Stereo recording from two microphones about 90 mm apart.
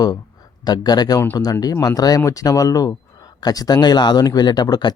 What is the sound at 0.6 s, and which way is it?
Speech, 50° left (ahead or behind).